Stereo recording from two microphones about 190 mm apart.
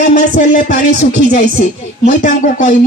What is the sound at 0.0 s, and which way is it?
Speech, 40° left (ahead or behind).